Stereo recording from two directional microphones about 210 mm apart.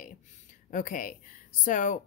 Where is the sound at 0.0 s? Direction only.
40° left (ahead or behind).